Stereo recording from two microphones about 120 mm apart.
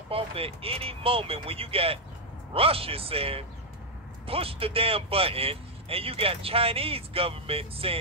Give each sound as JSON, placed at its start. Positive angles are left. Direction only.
{"t": 0.1, "sound": "speech", "side_deg": -50}